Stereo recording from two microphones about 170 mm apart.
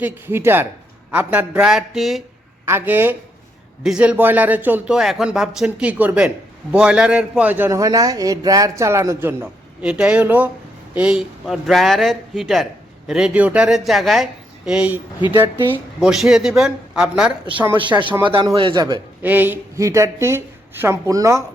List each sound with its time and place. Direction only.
0.0 s speech: 15° right (ahead or behind)
2.6 s speech: 10° right (ahead or behind)
15.3 s a man's voice: 25° right (ahead or behind)
15.6 s speech: 10° right (ahead or behind)
18.2 s a man's voice: 30° right (ahead or behind)
19.2 s speech: 10° right (ahead or behind)